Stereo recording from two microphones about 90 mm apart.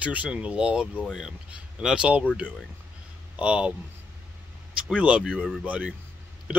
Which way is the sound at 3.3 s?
10° right (ahead or behind).